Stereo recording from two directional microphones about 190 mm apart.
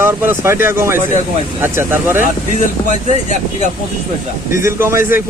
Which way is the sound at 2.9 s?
40° right (ahead or behind).